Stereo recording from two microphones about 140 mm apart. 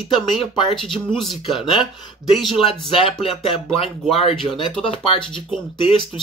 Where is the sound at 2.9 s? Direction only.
40° left (ahead or behind).